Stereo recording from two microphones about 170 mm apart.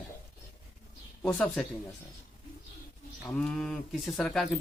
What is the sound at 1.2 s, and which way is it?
Speech, 5° left (ahead or behind).